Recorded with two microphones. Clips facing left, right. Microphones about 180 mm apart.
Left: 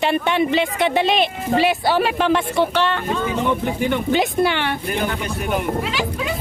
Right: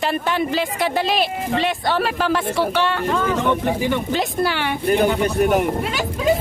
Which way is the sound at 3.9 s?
Centre (ahead or behind).